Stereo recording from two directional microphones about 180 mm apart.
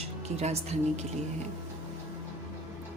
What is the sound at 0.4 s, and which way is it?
Speech, 40° right (ahead or behind).